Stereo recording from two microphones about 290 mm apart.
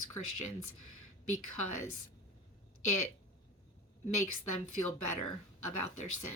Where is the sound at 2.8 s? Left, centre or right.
Left.